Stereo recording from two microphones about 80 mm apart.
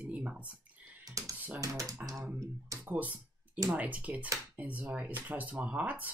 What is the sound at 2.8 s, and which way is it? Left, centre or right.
Speech, right.